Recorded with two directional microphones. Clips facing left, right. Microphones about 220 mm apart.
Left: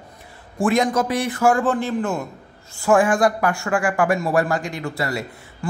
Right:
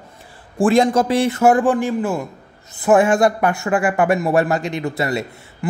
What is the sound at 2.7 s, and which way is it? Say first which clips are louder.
Speech: right 3 dB; 20° right (ahead or behind).